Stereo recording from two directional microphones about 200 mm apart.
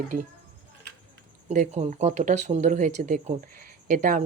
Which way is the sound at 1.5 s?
35° right (ahead or behind).